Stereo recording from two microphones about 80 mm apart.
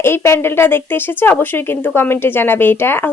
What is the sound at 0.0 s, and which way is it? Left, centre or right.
Speech, left.